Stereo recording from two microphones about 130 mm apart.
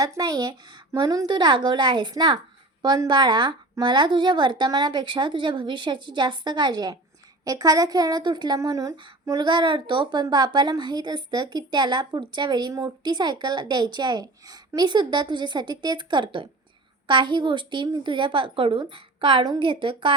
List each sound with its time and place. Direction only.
0.0 s a woman's voice: 30° right (ahead or behind)
9.4 s a woman's voice: 35° right (ahead or behind)